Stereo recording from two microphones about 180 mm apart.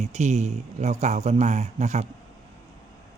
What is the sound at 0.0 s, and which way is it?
A man's voice, 40° right (ahead or behind).